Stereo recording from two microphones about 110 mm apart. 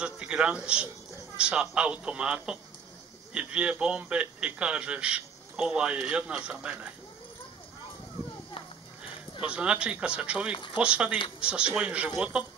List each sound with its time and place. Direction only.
0.0 s a man's voice: 10° right (ahead or behind)
9.4 s a man's voice: 10° right (ahead or behind)
10.5 s speech: 50° left (ahead or behind)
10.8 s a man's voice: 10° right (ahead or behind)